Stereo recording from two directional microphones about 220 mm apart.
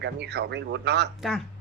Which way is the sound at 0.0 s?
50° right (ahead or behind).